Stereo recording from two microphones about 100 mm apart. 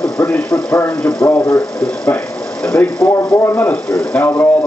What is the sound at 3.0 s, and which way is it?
Speech, 25° left (ahead or behind).